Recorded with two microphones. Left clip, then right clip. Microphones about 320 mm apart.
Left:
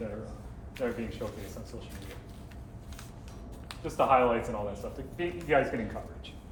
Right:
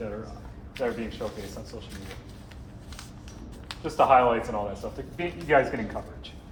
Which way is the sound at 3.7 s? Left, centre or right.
Right.